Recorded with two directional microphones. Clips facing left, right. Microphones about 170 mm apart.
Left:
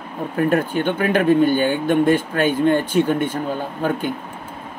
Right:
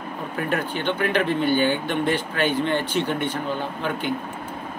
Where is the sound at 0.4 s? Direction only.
50° left (ahead or behind).